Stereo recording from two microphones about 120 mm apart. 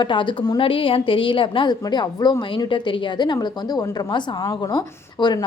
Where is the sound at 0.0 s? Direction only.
45° left (ahead or behind).